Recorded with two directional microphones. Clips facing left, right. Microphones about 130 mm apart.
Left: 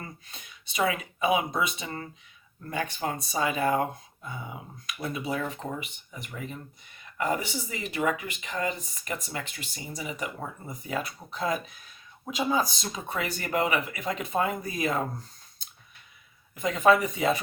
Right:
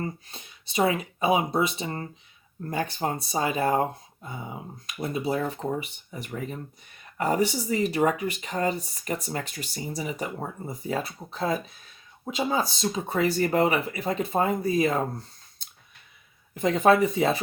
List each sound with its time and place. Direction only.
0.0 s speech: 35° right (ahead or behind)
16.9 s speech: 30° right (ahead or behind)